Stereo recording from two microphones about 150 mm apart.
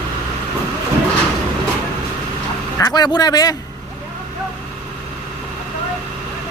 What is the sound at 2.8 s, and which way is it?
Speech, 25° left (ahead or behind).